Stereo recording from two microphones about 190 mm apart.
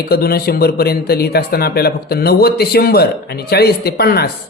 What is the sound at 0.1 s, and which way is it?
A man's voice, 55° left (ahead or behind).